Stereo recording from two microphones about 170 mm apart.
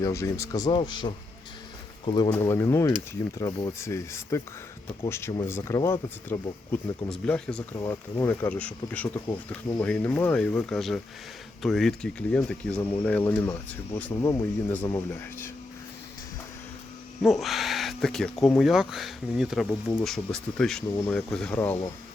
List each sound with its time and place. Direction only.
0.0 s speech: 20° left (ahead or behind)
7.8 s speech: 15° left (ahead or behind); by 12.4 s centre (ahead or behind)
12.8 s speech: 15° left (ahead or behind)
17.2 s speech: centre (ahead or behind)